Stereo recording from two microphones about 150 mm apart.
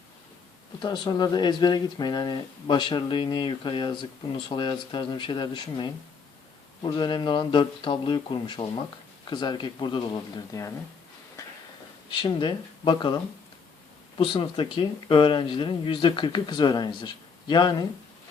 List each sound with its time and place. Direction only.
0.8 s speech: 30° left (ahead or behind)
12.1 s speech: 30° left (ahead or behind)